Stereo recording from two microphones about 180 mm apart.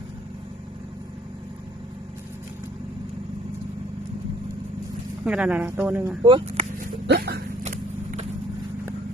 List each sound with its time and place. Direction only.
5.2 s speech: 5° right (ahead or behind)
6.2 s speech: 30° right (ahead or behind)
7.1 s speech: 60° right (ahead or behind)
7.7 s vehicle: 40° right (ahead or behind)